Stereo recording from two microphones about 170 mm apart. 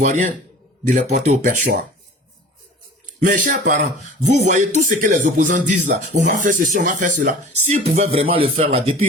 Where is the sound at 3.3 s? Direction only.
50° right (ahead or behind).